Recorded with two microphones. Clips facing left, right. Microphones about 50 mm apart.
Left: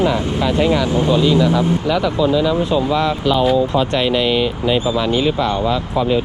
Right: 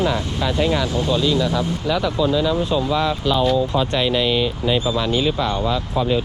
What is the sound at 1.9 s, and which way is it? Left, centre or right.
Speech, left.